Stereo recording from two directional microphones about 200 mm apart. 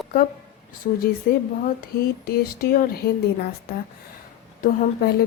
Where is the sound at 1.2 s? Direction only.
50° left (ahead or behind).